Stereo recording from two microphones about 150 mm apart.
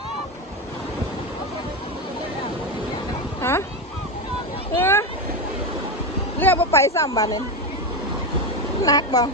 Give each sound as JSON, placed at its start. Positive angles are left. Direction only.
{"t": 3.4, "sound": "a sound", "side_deg": 15}
{"t": 4.8, "sound": "vehicle", "side_deg": 15}
{"t": 6.4, "sound": "a woman's voice", "side_deg": 15}
{"t": 8.8, "sound": "speech", "side_deg": 25}